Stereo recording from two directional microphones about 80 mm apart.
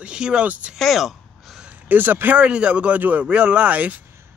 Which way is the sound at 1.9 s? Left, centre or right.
Right.